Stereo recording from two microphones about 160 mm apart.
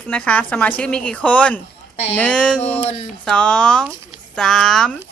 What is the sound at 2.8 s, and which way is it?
Speech, 35° left (ahead or behind).